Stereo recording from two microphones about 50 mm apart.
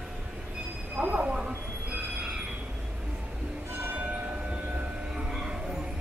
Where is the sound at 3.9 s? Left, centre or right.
Right.